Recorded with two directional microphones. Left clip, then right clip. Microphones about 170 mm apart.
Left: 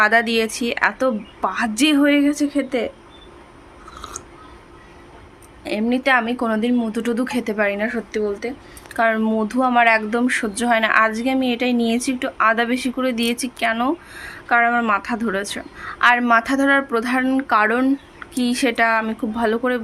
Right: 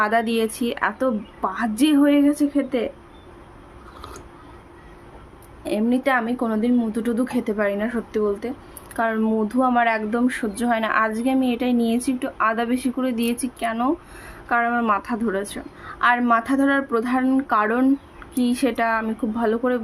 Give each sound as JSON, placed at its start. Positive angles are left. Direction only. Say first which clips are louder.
{"t": 0.0, "sound": "speech", "louder": "left 4 dB", "side_deg": -10}
{"t": 5.6, "sound": "a woman's voice", "louder": "left 1 dB", "side_deg": -20}
{"t": 6.0, "sound": "speech", "louder": "left 3 dB", "side_deg": -5}
{"t": 8.4, "sound": "a woman's voice", "louder": "left 3 dB", "side_deg": -20}
{"t": 9.0, "sound": "speech", "louder": "left 4 dB", "side_deg": -5}